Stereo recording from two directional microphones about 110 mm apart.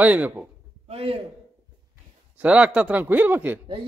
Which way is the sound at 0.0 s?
15° right (ahead or behind).